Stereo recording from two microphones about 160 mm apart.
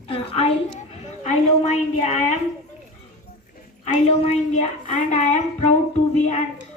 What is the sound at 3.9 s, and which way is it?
A woman's voice, 45° left (ahead or behind).